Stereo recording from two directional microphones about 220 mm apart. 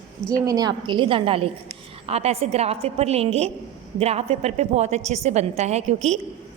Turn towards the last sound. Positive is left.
turn(degrees=-30)  # may be behind; listen again after turning